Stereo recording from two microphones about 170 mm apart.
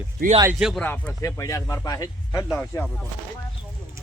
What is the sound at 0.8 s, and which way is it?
Speech, 10° left (ahead or behind).